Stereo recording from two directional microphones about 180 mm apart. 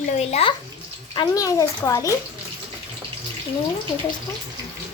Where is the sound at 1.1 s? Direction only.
25° left (ahead or behind).